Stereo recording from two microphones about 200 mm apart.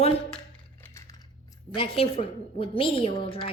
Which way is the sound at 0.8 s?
15° left (ahead or behind).